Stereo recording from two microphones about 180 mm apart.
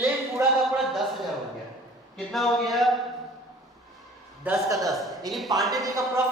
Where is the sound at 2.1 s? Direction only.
Centre (ahead or behind).